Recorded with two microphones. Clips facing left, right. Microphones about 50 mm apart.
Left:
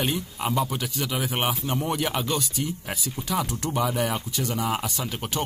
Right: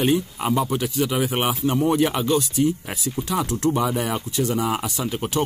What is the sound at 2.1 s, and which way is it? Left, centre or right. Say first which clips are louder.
Speech: right 6 dB; centre.